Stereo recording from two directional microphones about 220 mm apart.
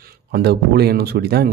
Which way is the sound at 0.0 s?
45° right (ahead or behind).